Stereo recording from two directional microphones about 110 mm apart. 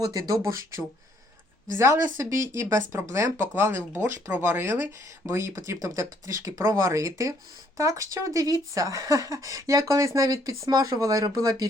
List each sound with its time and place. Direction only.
0.0 s speech: 35° right (ahead or behind)
1.8 s speech: 25° right (ahead or behind)